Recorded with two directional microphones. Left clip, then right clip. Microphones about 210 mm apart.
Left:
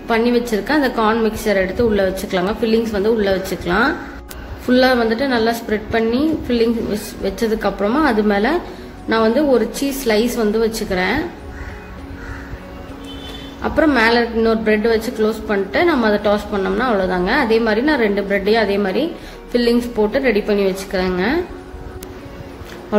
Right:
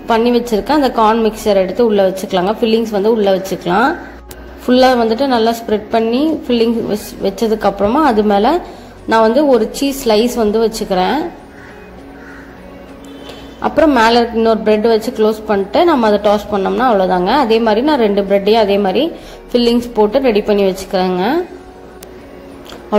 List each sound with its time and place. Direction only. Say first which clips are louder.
0.1 s a woman's voice: right 4 dB; 20° right (ahead or behind)
13.6 s a woman's voice: right 4 dB; 15° right (ahead or behind)